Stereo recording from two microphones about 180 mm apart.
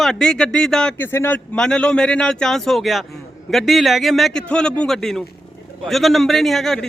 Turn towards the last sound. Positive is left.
turn(degrees=0)  # may be behind; listen again after turning